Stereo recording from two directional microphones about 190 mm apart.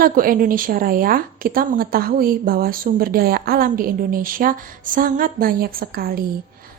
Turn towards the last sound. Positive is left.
turn(degrees=-50)  # may be behind; listen again after turning